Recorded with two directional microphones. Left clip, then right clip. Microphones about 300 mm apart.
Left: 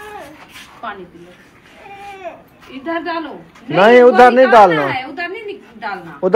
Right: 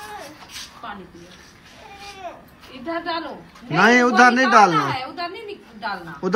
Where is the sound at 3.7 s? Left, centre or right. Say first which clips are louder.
Left 8 dB; centre.